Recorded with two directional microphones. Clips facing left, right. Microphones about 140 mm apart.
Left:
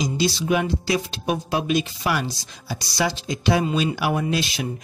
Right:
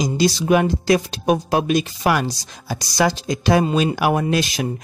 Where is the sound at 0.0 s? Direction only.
50° right (ahead or behind).